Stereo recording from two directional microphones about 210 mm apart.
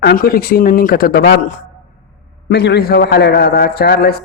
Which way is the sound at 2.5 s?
50° left (ahead or behind).